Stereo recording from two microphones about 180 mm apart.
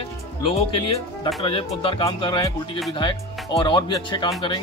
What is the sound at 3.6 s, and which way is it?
Music, 25° left (ahead or behind).